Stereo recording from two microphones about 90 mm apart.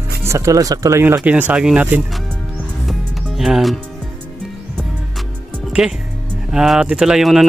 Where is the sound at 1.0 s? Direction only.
20° right (ahead or behind).